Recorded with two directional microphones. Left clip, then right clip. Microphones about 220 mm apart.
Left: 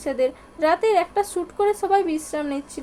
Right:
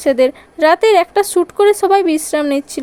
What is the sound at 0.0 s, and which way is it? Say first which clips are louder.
Speech: right 10 dB; 40° right (ahead or behind).